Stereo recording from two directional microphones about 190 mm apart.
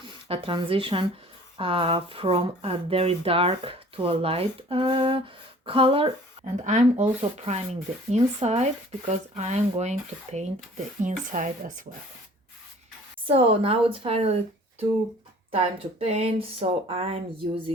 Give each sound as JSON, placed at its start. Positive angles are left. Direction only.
{"t": 0.0, "sound": "a woman's voice", "side_deg": -25}
{"t": 6.4, "sound": "speech", "side_deg": -40}
{"t": 11.0, "sound": "speech", "side_deg": -40}
{"t": 13.2, "sound": "speech", "side_deg": -30}
{"t": 15.5, "sound": "speech", "side_deg": -30}